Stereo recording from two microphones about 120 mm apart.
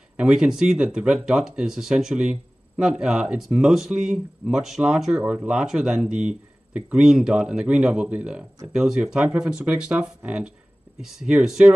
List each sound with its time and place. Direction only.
0.2 s speech: 10° right (ahead or behind)